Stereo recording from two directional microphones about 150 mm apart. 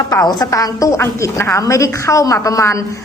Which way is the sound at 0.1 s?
25° left (ahead or behind).